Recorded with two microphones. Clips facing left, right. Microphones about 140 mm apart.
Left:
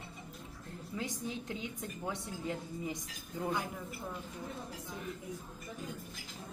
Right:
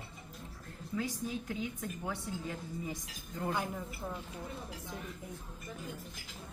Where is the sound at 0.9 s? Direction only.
20° left (ahead or behind).